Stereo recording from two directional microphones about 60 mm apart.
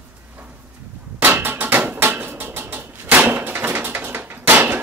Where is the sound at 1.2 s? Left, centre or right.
Right.